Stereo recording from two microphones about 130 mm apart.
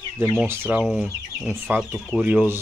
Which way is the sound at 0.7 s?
5° right (ahead or behind).